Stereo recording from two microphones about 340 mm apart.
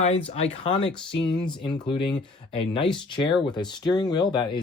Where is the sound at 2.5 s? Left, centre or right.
Centre.